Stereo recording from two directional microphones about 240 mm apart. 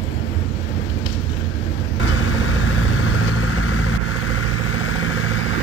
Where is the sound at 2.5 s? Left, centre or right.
Left.